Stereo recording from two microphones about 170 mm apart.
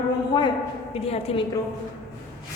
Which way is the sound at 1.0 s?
35° left (ahead or behind).